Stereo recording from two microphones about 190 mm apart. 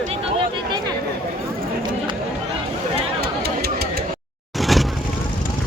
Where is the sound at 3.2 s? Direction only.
55° right (ahead or behind).